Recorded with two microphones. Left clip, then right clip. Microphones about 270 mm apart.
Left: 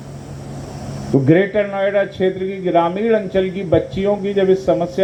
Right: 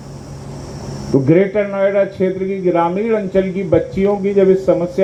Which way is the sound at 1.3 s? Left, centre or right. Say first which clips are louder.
Right 1 dB; left.